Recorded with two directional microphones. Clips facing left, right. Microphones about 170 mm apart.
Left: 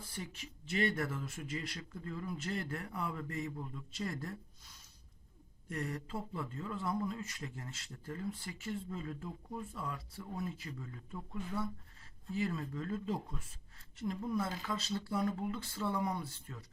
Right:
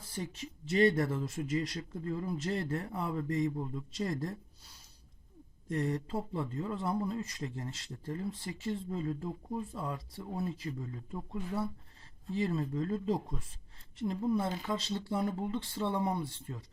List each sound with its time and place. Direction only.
0.1 s speech: 30° right (ahead or behind)